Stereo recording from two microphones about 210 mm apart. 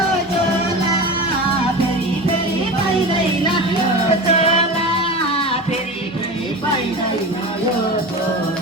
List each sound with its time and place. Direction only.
4.1 s music: 30° left (ahead or behind)